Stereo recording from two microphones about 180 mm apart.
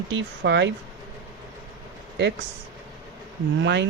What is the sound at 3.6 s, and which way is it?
Speech, 75° right (ahead or behind).